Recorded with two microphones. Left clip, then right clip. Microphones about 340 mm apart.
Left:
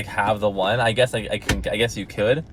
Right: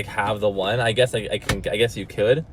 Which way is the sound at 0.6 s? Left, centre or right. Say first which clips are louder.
Left 2 dB; centre.